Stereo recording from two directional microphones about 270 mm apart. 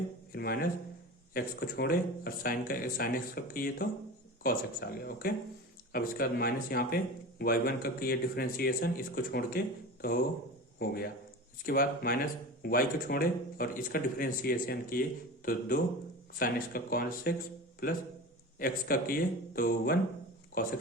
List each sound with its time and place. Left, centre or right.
0.3 s speech: left